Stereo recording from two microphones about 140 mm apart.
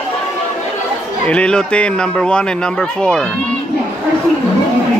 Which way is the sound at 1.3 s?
5° left (ahead or behind).